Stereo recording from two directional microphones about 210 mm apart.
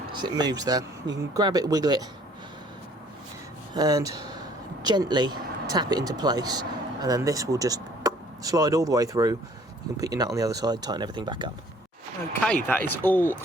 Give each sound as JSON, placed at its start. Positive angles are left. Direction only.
{"t": 0.2, "sound": "speech", "side_deg": -20}
{"t": 3.8, "sound": "speech", "side_deg": -20}
{"t": 12.6, "sound": "speech", "side_deg": 10}